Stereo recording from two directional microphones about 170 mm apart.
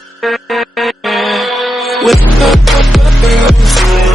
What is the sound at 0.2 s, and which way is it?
Music, centre (ahead or behind).